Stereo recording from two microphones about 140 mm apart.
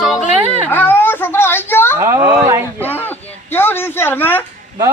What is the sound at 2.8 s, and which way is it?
Speech, 15° left (ahead or behind).